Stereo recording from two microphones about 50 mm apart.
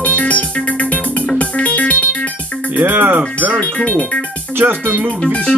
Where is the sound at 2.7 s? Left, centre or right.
Right.